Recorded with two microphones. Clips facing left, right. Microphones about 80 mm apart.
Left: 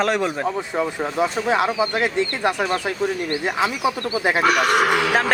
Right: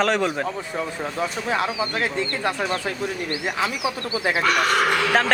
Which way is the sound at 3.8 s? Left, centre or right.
Left.